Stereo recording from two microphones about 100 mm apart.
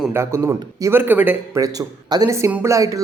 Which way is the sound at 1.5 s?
40° right (ahead or behind).